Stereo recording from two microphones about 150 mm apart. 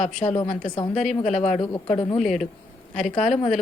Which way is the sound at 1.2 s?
50° left (ahead or behind).